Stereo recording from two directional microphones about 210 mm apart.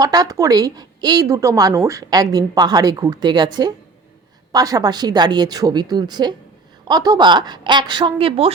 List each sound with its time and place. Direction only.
0.0 s a woman's voice: 15° right (ahead or behind)